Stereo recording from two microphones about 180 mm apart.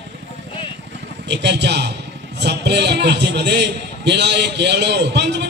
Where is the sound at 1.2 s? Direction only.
70° right (ahead or behind).